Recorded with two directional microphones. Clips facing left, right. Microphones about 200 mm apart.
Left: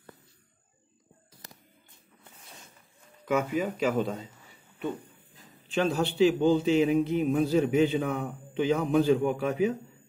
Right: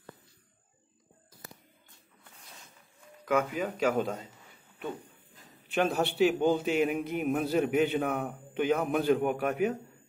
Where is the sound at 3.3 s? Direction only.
5° left (ahead or behind).